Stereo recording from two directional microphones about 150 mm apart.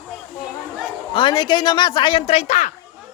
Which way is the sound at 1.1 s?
30° left (ahead or behind).